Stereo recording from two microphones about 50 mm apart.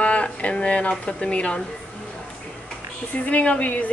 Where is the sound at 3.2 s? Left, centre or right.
Left.